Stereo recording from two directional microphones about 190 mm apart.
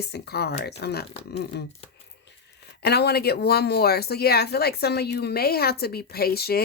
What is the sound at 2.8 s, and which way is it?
Speech, 60° left (ahead or behind).